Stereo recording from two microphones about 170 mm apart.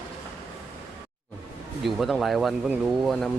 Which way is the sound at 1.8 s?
Centre (ahead or behind).